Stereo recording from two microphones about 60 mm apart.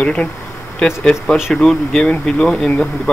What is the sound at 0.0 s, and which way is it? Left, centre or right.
Speech, centre.